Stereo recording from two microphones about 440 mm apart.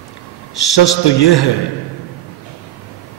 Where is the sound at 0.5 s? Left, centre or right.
Left.